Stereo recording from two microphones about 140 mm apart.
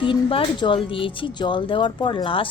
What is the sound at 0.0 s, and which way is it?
Speech, 40° left (ahead or behind).